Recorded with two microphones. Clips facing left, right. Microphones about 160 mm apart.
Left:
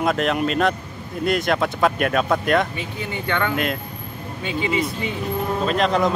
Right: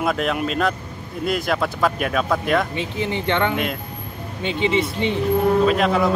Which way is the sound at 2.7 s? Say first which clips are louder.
Right 5 dB; 25° right (ahead or behind).